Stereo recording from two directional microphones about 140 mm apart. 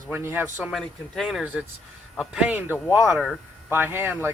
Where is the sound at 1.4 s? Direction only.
10° right (ahead or behind).